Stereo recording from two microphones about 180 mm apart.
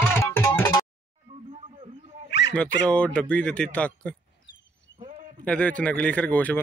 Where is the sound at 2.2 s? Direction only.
75° left (ahead or behind).